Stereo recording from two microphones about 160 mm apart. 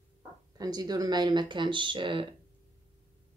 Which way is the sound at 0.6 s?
25° right (ahead or behind).